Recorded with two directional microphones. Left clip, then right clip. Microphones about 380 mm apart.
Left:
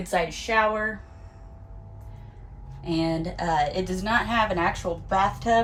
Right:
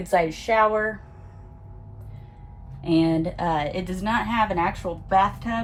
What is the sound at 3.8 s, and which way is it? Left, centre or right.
Speech, centre.